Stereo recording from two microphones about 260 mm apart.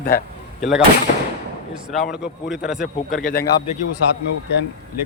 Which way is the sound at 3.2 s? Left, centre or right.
Left.